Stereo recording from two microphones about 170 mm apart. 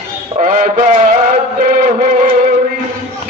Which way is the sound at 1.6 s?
50° right (ahead or behind).